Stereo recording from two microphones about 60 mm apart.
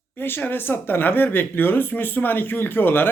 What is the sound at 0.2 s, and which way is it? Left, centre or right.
Speech, left.